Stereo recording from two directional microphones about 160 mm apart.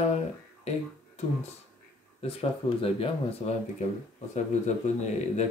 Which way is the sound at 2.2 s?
35° left (ahead or behind).